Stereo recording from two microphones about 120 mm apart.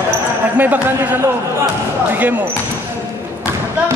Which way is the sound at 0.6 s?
15° right (ahead or behind).